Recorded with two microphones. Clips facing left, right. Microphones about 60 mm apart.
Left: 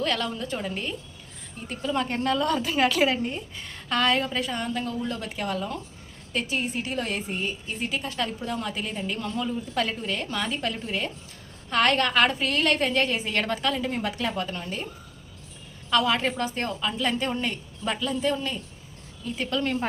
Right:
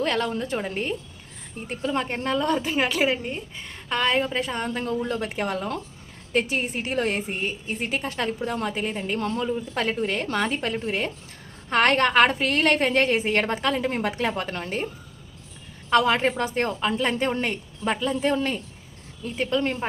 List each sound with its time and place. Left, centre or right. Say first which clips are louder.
0.0 s a woman's voice: right 3 dB; right
15.9 s a woman's voice: right 3 dB; right
19.5 s a woman's voice: right 3 dB; right